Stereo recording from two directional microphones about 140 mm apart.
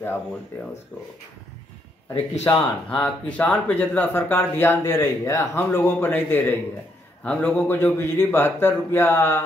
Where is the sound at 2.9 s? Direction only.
10° left (ahead or behind).